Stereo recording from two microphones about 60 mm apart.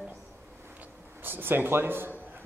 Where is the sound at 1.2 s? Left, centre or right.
Right.